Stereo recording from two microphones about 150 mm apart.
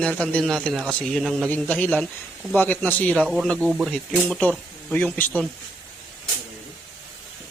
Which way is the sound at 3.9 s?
5° left (ahead or behind).